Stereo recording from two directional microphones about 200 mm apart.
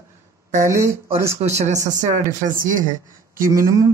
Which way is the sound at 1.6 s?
40° right (ahead or behind).